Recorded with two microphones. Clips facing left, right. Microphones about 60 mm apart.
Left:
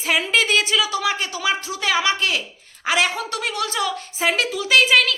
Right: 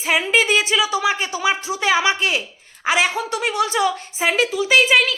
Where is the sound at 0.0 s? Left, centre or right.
Centre.